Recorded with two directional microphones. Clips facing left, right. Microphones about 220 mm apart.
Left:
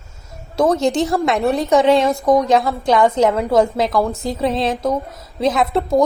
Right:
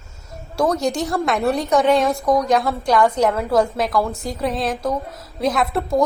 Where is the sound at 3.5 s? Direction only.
Centre (ahead or behind).